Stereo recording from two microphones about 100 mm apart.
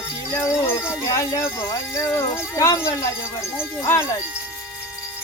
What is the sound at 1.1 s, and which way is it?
Speech, 35° left (ahead or behind).